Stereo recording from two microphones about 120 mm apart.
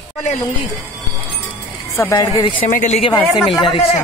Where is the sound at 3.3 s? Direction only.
Centre (ahead or behind).